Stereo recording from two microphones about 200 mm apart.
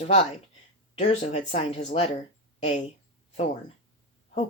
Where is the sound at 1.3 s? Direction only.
35° left (ahead or behind).